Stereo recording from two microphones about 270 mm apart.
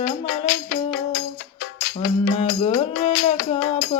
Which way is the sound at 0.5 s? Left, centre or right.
Left.